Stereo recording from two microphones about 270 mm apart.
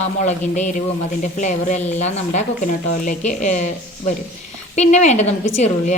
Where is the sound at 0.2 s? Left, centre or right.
Left.